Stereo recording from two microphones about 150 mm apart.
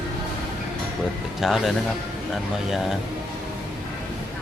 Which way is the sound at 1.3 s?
Centre (ahead or behind).